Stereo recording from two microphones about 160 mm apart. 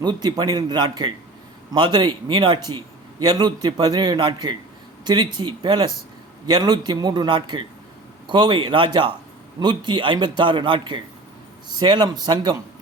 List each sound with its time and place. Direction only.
0.0 s a man's voice: 25° right (ahead or behind)